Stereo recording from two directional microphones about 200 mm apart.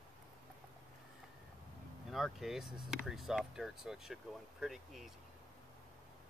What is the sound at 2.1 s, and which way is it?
Speech, centre (ahead or behind).